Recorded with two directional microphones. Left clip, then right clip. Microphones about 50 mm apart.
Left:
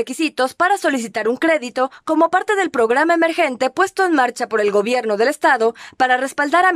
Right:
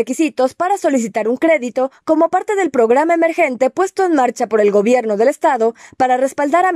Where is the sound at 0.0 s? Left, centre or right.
Right.